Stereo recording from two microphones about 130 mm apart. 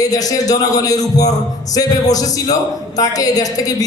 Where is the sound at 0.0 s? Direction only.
25° left (ahead or behind).